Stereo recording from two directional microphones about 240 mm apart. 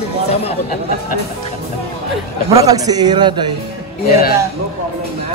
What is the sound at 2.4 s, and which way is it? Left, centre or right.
A man's voice, centre.